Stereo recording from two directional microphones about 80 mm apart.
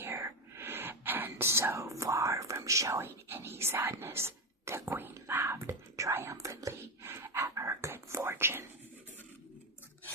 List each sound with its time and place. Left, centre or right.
0.0 s whispering: right